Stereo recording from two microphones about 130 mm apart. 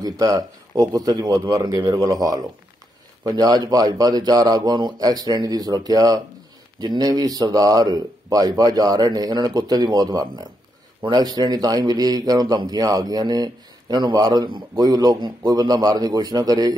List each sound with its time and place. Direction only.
0.0 s a man's voice: 30° right (ahead or behind)